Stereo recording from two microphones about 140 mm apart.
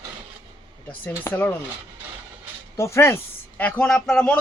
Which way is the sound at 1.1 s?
15° left (ahead or behind).